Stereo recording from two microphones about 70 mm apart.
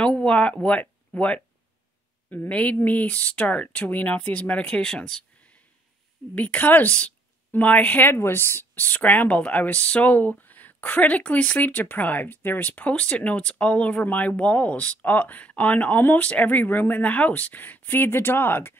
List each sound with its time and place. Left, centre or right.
0.0 s a woman's voice: centre
6.3 s a woman's voice: left